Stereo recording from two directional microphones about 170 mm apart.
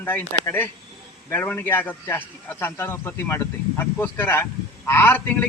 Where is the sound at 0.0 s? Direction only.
10° left (ahead or behind).